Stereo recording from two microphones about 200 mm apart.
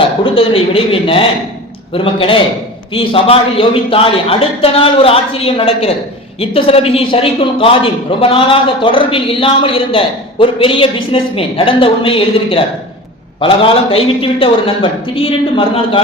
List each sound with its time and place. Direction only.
0.3 s a man's voice: 30° left (ahead or behind)